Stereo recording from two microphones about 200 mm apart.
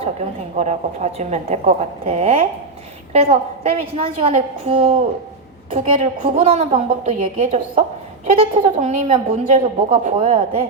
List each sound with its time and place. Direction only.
0.5 s a woman's voice: 35° right (ahead or behind)